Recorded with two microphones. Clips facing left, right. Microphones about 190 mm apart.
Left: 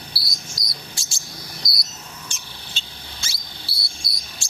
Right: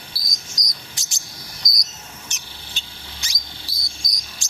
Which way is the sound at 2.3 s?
20° right (ahead or behind).